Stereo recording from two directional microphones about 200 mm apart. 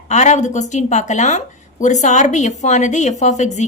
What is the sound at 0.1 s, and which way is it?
Speech, 35° left (ahead or behind).